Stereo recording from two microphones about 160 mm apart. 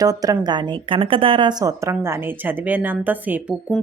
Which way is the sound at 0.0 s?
25° right (ahead or behind).